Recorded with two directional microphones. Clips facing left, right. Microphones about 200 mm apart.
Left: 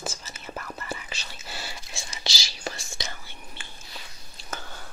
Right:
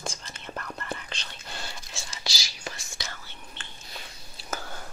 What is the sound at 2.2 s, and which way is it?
Whispering, 25° left (ahead or behind).